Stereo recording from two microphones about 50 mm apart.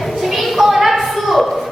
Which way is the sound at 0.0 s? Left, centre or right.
Centre.